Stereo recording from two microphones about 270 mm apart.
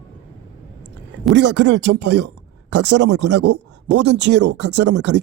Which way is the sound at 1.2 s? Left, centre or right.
Right.